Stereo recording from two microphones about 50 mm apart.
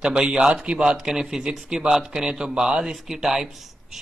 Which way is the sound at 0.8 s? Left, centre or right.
Centre.